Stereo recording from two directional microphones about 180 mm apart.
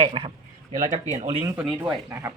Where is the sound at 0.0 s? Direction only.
30° right (ahead or behind).